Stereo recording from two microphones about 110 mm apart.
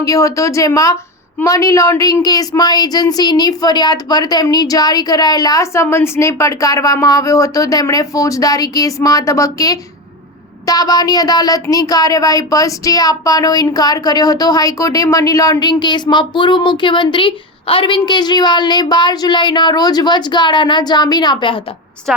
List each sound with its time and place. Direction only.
0.0 s speech: 30° left (ahead or behind)